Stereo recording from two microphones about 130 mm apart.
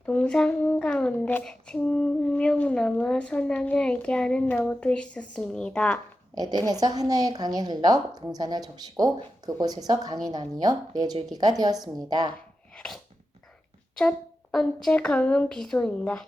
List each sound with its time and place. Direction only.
0.0 s a child's voice: 10° left (ahead or behind)
6.3 s a woman's voice: 30° right (ahead or behind)
14.8 s a child's voice: 5° left (ahead or behind)